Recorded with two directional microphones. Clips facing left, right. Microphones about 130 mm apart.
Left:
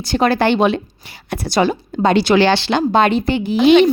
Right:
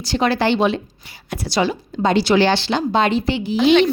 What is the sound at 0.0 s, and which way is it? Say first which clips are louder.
Speech: left 3 dB; 50° left (ahead or behind).